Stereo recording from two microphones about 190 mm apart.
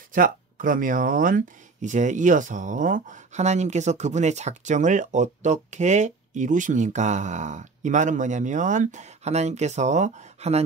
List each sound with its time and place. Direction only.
0.1 s speech: 45° right (ahead or behind)